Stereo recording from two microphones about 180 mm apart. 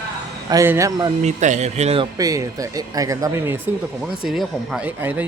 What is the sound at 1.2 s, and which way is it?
Speech, 40° right (ahead or behind).